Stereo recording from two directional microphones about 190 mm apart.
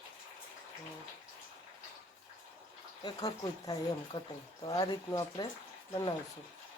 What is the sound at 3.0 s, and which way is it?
Speech, 20° left (ahead or behind).